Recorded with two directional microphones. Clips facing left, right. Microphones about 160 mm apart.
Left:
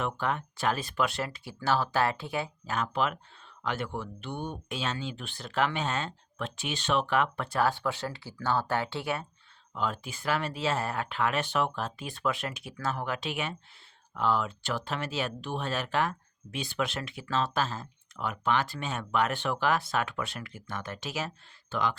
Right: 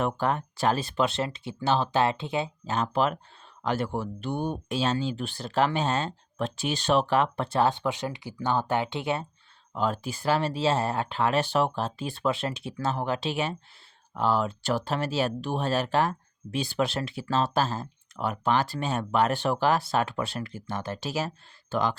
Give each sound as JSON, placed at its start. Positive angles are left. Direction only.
{"t": 0.0, "sound": "speech", "side_deg": -35}
{"t": 9.7, "sound": "speech", "side_deg": -40}